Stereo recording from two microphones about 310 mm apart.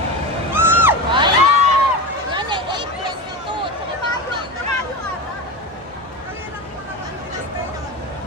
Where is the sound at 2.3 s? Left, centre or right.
Centre.